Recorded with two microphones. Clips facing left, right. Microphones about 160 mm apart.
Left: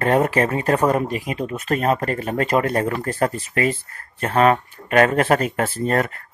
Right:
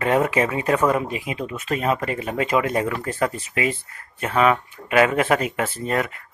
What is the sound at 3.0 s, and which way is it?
Speech, 35° left (ahead or behind).